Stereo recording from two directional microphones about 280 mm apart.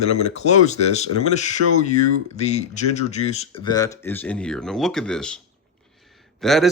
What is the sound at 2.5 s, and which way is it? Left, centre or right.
A man's voice, left.